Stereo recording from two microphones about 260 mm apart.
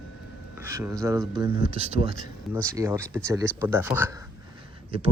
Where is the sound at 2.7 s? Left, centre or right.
Centre.